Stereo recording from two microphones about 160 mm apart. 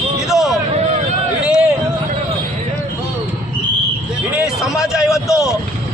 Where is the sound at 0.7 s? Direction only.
45° right (ahead or behind).